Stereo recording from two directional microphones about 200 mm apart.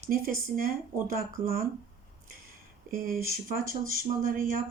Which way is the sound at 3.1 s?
15° right (ahead or behind).